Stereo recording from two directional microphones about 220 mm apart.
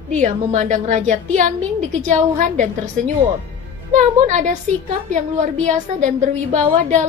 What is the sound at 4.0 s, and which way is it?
A woman's voice, 35° right (ahead or behind).